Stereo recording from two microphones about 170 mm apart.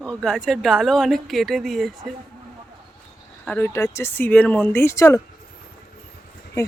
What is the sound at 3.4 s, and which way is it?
Speech, 10° left (ahead or behind).